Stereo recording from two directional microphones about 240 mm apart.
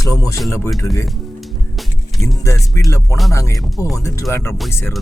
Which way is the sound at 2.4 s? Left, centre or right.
Centre.